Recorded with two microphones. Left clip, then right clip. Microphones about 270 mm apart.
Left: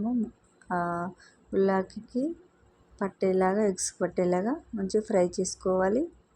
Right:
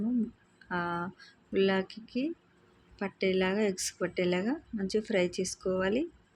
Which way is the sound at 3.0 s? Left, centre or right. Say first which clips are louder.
Left 4 dB; centre.